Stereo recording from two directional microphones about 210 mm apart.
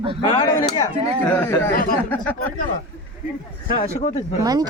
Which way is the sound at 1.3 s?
10° left (ahead or behind).